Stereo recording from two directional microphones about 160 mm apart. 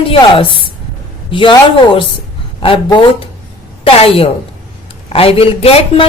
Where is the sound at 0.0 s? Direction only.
35° left (ahead or behind).